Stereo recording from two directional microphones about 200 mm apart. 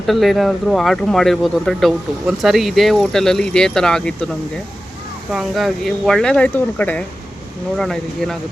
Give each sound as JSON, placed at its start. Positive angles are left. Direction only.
{"t": 0.1, "sound": "speech", "side_deg": 0}
{"t": 5.3, "sound": "speech", "side_deg": 0}